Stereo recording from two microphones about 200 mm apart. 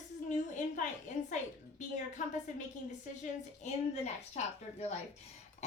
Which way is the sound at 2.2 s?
40° left (ahead or behind).